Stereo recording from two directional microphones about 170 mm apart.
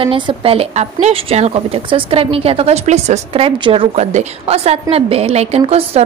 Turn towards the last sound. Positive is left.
turn(degrees=-35)  # may be behind; listen again after turning